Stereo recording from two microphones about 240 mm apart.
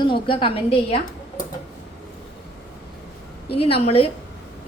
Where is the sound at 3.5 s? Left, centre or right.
Left.